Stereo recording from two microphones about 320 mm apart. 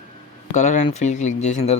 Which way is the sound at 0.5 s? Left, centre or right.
Left.